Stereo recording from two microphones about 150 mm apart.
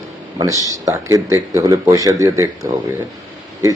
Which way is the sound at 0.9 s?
20° right (ahead or behind).